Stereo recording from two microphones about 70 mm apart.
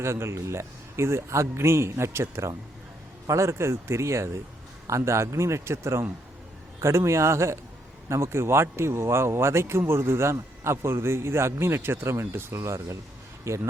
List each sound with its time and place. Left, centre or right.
0.0 s a man's voice: right